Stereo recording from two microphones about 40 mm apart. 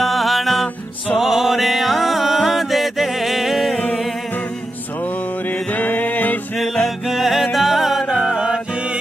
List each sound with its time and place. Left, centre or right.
0.0 s music: centre
1.1 s music: centre
5.7 s music: left
6.6 s music: centre
7.1 s music: centre
8.3 s music: centre